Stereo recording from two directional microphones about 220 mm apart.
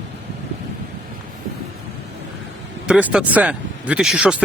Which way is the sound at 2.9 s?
5° right (ahead or behind).